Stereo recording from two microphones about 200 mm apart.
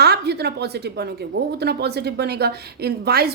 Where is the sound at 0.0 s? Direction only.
55° right (ahead or behind).